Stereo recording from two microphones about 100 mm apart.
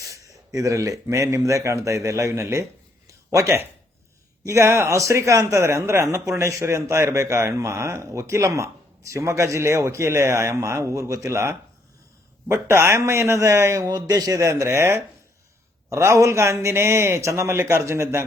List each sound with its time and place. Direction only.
0.0 s speech: 30° right (ahead or behind)
13.8 s speech: 40° right (ahead or behind)